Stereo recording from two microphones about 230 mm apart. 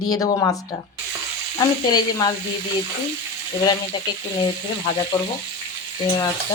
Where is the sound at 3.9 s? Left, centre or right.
Left.